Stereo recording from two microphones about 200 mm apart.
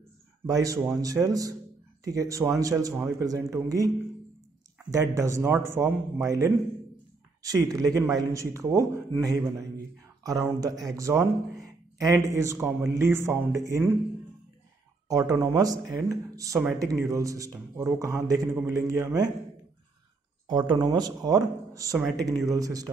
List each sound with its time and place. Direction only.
0.5 s speech: 20° right (ahead or behind)
15.0 s speech: 15° right (ahead or behind)
20.4 s speech: 20° right (ahead or behind)